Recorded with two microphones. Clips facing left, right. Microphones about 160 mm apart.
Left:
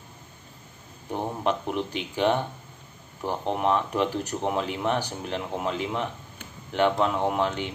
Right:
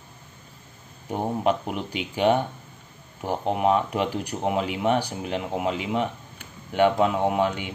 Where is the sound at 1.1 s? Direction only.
10° right (ahead or behind).